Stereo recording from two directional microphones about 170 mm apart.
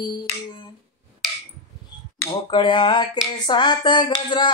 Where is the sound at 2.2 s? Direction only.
25° left (ahead or behind).